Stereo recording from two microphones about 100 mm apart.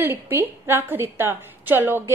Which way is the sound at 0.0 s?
20° right (ahead or behind).